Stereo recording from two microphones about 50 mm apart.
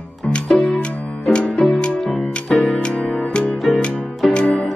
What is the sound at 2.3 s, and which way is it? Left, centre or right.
Music, left.